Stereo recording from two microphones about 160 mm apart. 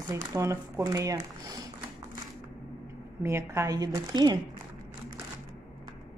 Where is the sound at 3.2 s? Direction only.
15° right (ahead or behind).